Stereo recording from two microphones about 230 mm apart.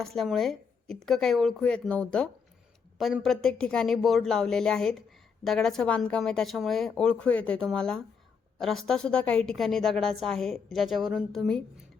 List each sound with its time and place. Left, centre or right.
0.0 s speech: centre